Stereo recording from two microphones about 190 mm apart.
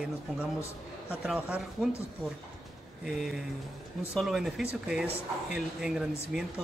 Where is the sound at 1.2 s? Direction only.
5° right (ahead or behind).